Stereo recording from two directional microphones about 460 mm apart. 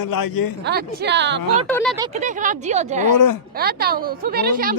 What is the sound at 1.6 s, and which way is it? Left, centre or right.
Speech, centre.